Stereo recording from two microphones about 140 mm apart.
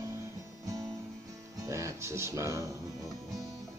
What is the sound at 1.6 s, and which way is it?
Music, 20° right (ahead or behind).